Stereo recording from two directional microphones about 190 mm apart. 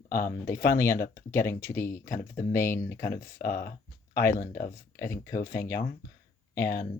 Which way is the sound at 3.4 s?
50° left (ahead or behind).